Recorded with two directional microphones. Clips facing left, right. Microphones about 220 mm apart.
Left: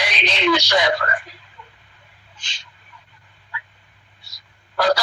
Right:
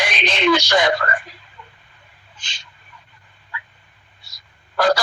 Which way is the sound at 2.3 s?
50° right (ahead or behind).